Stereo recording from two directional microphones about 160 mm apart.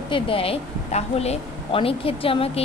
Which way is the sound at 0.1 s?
35° left (ahead or behind).